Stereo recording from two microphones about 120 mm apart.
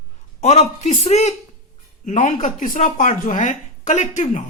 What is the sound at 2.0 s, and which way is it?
Speech, 90° left.